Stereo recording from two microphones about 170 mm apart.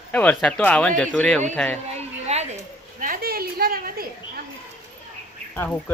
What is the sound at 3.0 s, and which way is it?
A woman's voice, 60° right (ahead or behind).